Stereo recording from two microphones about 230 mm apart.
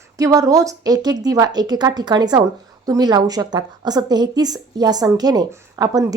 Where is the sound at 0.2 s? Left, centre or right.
Centre.